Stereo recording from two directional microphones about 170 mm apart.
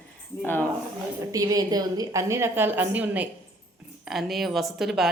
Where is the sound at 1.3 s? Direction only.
20° right (ahead or behind); by 5.1 s centre (ahead or behind).